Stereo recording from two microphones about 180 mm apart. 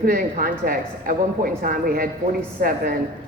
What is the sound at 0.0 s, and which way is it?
A woman's voice, 55° right (ahead or behind).